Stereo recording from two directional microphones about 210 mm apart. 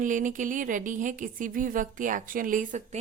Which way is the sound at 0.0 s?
35° right (ahead or behind).